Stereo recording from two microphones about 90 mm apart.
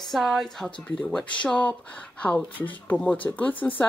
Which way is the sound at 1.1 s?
15° left (ahead or behind).